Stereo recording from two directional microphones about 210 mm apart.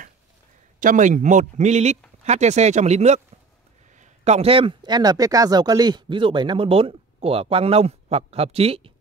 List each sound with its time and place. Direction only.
0.7 s a man's voice: 40° right (ahead or behind)